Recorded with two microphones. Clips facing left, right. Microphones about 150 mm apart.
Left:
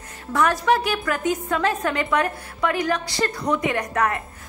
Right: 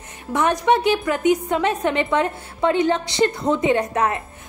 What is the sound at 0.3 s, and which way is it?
A woman's voice, 20° right (ahead or behind).